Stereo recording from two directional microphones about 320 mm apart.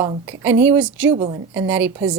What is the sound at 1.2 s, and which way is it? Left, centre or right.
Speech, centre.